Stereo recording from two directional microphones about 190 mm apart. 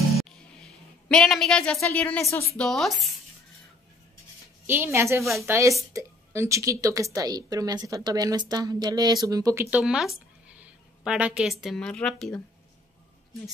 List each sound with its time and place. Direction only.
0.2 s a sound: centre (ahead or behind)
2.4 s speech: 5° left (ahead or behind)
4.6 s a woman's voice: 10° right (ahead or behind)